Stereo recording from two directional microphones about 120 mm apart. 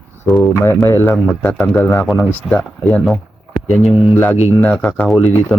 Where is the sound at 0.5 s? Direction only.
20° left (ahead or behind).